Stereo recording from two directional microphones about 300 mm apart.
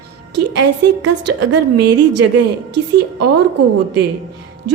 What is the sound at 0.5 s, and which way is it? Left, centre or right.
A woman's voice, right.